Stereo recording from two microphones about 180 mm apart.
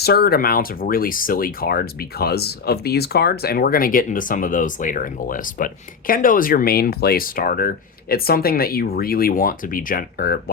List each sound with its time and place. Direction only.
0.0 s speech: 60° left (ahead or behind)